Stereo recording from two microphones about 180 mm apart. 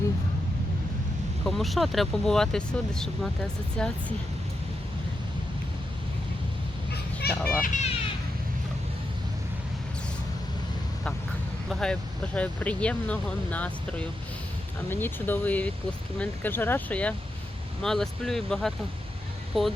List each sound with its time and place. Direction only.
1.5 s speech: centre (ahead or behind)
7.2 s a child's voice: 60° left (ahead or behind)
7.6 s speech: 40° left (ahead or behind)
11.7 s speech: 5° left (ahead or behind)